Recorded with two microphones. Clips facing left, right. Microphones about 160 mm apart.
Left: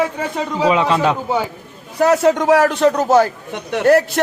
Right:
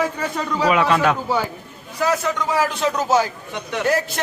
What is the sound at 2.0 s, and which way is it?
A man's voice, 65° left (ahead or behind).